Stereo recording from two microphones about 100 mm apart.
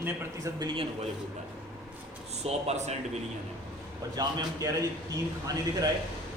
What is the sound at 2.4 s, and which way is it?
Speech, 90° right.